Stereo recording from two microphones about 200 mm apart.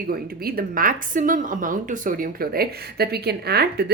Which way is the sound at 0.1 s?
50° right (ahead or behind).